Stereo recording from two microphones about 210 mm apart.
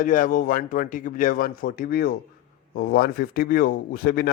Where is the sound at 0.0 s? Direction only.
40° left (ahead or behind).